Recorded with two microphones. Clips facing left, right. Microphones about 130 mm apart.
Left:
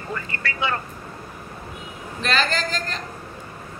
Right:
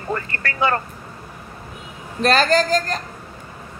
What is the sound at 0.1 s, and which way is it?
Speech, 50° right (ahead or behind).